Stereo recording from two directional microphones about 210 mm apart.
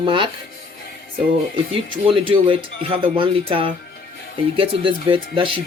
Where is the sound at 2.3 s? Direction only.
25° right (ahead or behind).